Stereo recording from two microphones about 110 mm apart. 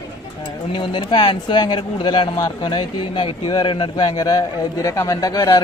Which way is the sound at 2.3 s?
40° left (ahead or behind).